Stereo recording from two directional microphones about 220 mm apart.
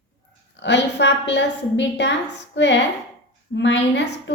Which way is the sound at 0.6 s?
50° left (ahead or behind).